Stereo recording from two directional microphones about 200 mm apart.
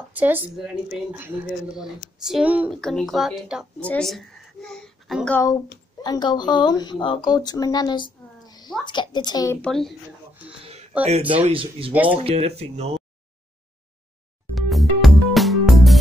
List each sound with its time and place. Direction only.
0.1 s a woman's voice: 10° right (ahead or behind)
6.0 s a woman's voice: 20° left (ahead or behind)
9.6 s a woman's voice: centre (ahead or behind)
10.6 s a sound: 30° right (ahead or behind)
11.1 s speech: 30° right (ahead or behind)
11.9 s a woman's voice: 10° right (ahead or behind)
12.2 s speech: 30° right (ahead or behind)
14.5 s music: centre (ahead or behind)